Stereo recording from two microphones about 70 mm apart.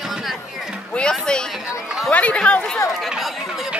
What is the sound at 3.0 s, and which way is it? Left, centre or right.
Speech, centre.